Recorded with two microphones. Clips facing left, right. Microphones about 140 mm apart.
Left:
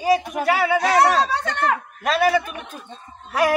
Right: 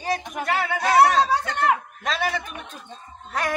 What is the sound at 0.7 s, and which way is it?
Speech, 75° left (ahead or behind).